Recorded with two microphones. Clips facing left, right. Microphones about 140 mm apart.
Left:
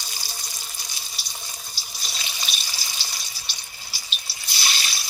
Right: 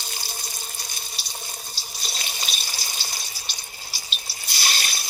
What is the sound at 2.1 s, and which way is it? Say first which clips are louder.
Water: right 1 dB; 45° right (ahead or behind).